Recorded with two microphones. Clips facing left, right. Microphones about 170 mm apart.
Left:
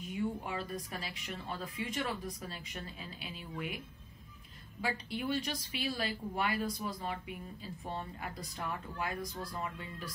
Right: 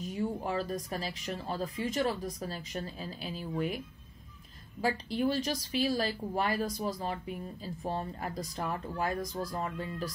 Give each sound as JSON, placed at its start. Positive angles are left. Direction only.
{"t": 0.0, "sound": "speech", "side_deg": -35}
{"t": 4.8, "sound": "speech", "side_deg": -40}